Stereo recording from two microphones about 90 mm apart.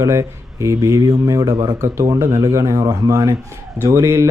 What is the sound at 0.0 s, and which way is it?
Speech, 35° right (ahead or behind).